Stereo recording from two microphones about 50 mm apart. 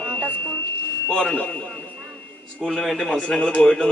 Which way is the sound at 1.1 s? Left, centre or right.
Centre.